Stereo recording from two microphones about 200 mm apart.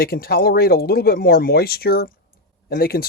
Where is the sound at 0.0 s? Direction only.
50° left (ahead or behind).